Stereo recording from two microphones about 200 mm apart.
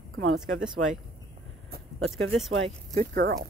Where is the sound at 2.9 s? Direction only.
50° right (ahead or behind).